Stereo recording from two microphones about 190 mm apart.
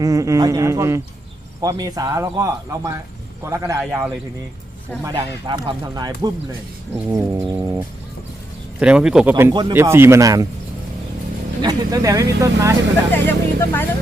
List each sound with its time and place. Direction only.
0.0 s speech: 15° right (ahead or behind)
5.0 s speech: 25° right (ahead or behind)
8.8 s speech: 5° right (ahead or behind)
9.3 s speech: 20° right (ahead or behind)
11.6 s speech: 20° right (ahead or behind)
13.1 s speech: 10° left (ahead or behind)